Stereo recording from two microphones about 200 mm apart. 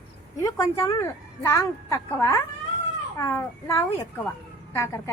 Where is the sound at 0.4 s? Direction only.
15° left (ahead or behind).